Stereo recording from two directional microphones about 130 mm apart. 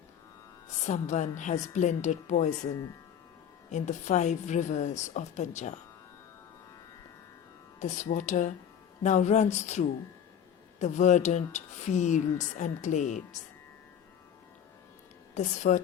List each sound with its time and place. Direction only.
0.9 s speech: 65° left (ahead or behind)
3.7 s speech: 65° left (ahead or behind)
7.8 s speech: 70° left (ahead or behind)
15.4 s speech: 65° left (ahead or behind)